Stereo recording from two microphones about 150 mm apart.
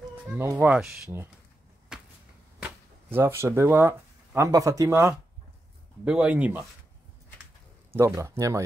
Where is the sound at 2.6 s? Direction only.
15° right (ahead or behind).